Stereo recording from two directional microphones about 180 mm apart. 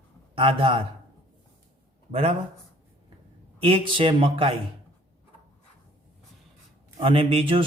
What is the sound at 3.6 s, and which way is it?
Speech, 30° right (ahead or behind).